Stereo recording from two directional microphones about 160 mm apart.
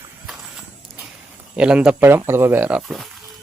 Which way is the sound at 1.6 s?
5° right (ahead or behind).